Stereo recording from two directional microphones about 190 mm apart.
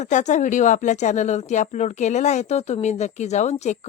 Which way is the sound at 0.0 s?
40° left (ahead or behind).